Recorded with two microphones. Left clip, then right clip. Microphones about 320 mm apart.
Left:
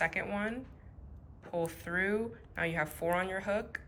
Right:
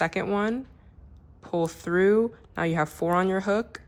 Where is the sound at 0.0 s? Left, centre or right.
Centre.